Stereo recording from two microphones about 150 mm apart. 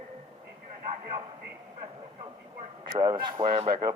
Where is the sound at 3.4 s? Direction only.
45° right (ahead or behind).